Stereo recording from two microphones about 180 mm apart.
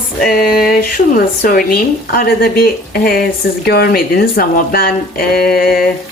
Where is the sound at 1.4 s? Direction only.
50° left (ahead or behind).